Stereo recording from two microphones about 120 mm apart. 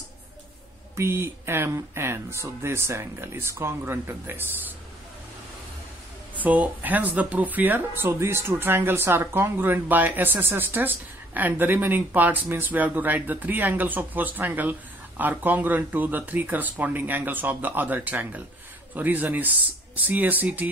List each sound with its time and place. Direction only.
0.9 s speech: 20° right (ahead or behind)
6.3 s speech: 15° right (ahead or behind)